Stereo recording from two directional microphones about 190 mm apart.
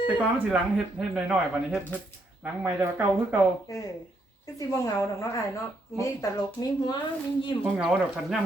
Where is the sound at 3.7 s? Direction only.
20° left (ahead or behind).